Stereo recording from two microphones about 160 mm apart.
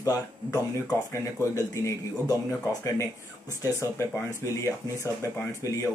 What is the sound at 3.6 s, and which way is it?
Speech, 20° left (ahead or behind).